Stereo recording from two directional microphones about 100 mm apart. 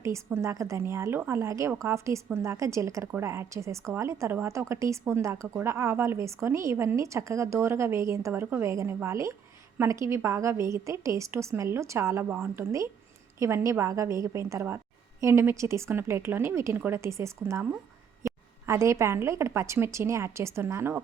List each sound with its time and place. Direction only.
0.3 s a woman's voice: 30° right (ahead or behind)